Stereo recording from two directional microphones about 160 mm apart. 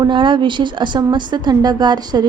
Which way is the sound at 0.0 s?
30° right (ahead or behind).